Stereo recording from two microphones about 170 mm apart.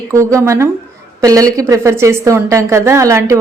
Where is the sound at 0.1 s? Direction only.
15° right (ahead or behind).